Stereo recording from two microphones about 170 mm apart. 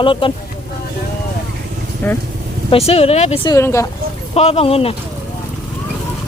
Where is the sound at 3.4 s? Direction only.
15° left (ahead or behind).